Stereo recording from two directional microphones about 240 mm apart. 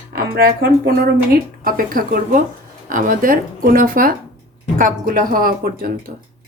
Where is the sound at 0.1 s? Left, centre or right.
Right.